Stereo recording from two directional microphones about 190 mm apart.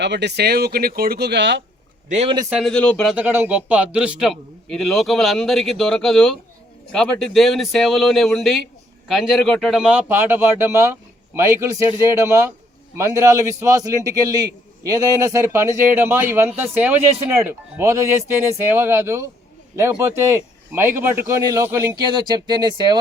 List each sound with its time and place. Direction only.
0.0 s speech: 65° right (ahead or behind)
2.0 s a man's voice: 35° right (ahead or behind)
2.5 s a man's voice: centre (ahead or behind)
3.2 s a man's voice: 10° right (ahead or behind)
22.0 s speech: 25° right (ahead or behind)